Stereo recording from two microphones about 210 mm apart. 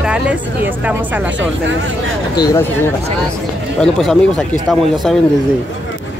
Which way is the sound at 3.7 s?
Centre (ahead or behind).